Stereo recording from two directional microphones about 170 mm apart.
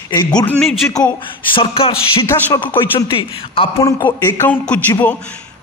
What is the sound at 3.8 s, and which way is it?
A man's voice, 15° left (ahead or behind).